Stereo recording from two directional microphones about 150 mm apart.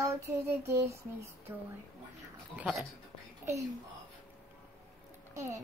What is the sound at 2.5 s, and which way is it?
Speech, 10° right (ahead or behind).